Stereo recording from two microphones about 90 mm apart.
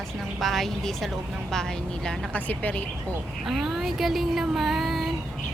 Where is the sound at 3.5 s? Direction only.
Centre (ahead or behind).